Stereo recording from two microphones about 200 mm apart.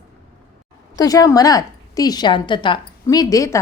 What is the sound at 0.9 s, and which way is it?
A woman's voice, 15° left (ahead or behind).